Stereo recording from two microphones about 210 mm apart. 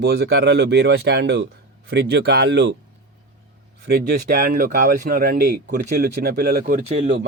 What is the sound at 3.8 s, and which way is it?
Speech, 45° right (ahead or behind).